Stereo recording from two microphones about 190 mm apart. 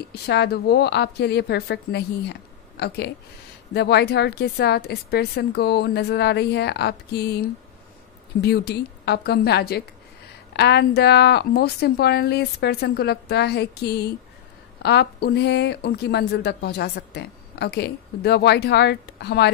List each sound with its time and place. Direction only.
0.1 s a woman's voice: 60° left (ahead or behind)
8.4 s a woman's voice: 60° left (ahead or behind)